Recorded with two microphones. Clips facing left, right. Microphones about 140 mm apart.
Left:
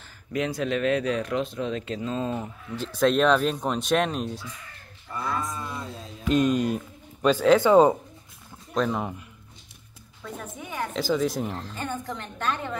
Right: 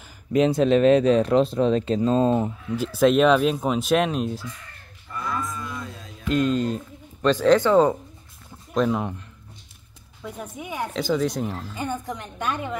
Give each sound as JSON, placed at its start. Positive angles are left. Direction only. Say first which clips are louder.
{"t": 0.3, "sound": "speech", "louder": "right 8 dB", "side_deg": -25}
{"t": 2.6, "sound": "speech", "louder": "right 1 dB", "side_deg": -10}
{"t": 5.4, "sound": "cattle", "louder": "right 1 dB", "side_deg": 25}
{"t": 6.2, "sound": "speech", "louder": "even", "side_deg": 20}
{"t": 8.7, "sound": "speech", "louder": "right 3 dB", "side_deg": 0}
{"t": 10.2, "sound": "a woman's voice", "louder": "right 3 dB", "side_deg": -10}
{"t": 10.9, "sound": "a woman's voice", "louder": "right 1 dB", "side_deg": 0}